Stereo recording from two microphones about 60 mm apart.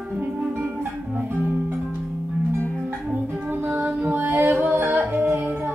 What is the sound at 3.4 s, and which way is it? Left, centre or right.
Music, right.